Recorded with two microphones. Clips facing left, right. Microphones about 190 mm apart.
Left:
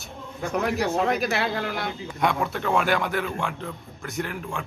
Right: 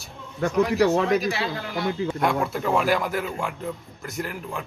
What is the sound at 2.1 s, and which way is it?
A man's voice, centre (ahead or behind).